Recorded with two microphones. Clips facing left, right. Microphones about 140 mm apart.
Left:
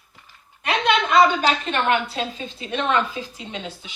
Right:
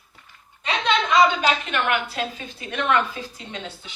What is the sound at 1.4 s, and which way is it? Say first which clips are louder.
A woman's voice: left 2 dB; 35° left (ahead or behind).